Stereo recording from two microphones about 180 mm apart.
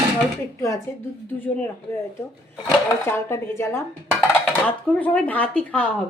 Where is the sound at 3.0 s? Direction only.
15° left (ahead or behind).